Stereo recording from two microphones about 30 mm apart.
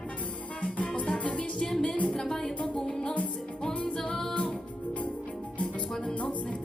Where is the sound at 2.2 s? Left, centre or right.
Centre.